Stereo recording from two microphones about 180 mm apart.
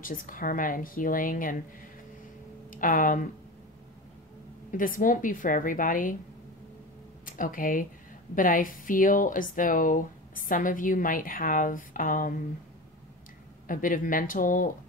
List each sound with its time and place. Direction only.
0.0 s speech: 50° left (ahead or behind)
2.7 s speech: 50° left (ahead or behind)
4.6 s speech: 50° left (ahead or behind)
7.2 s speech: 50° left (ahead or behind)
13.7 s speech: 50° left (ahead or behind)